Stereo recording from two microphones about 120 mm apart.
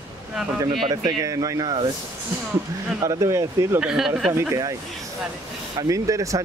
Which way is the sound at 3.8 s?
5° right (ahead or behind).